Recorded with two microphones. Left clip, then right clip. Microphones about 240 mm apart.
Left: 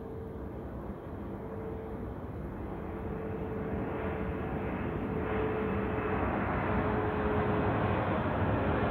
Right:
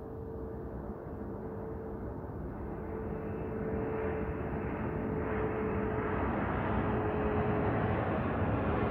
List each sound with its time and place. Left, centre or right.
3.9 s vehicle: left